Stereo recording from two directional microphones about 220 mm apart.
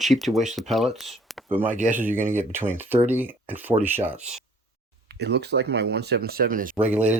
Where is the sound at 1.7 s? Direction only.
35° right (ahead or behind).